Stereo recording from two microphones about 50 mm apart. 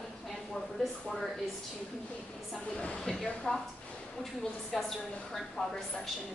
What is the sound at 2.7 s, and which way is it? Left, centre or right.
Speech, centre.